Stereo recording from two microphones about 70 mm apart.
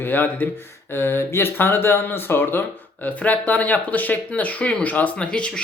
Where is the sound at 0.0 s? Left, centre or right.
Left.